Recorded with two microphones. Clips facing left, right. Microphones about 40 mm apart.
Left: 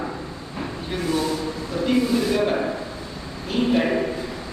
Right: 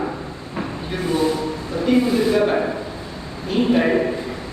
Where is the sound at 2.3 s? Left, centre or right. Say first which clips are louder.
Right 3 dB; centre.